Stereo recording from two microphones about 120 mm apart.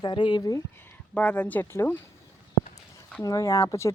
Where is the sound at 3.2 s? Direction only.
30° left (ahead or behind).